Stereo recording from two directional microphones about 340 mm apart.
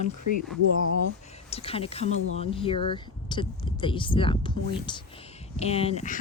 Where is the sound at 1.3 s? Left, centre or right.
Centre.